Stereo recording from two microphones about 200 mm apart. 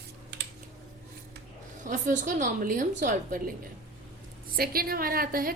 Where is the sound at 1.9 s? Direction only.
40° right (ahead or behind).